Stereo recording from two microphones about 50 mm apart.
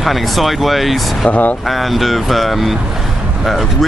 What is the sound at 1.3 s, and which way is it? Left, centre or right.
Speech, left.